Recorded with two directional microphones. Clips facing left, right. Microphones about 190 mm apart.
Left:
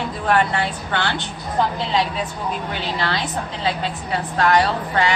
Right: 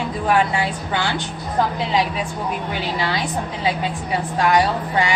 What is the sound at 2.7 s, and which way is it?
A woman's voice, 10° right (ahead or behind).